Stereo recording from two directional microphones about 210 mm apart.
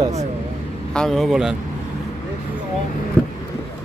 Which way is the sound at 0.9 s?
Centre (ahead or behind).